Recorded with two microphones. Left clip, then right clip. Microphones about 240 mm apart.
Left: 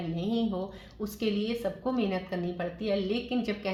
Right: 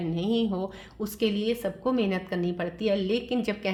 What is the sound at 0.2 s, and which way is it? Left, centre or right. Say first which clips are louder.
A woman's voice: right 3 dB; right.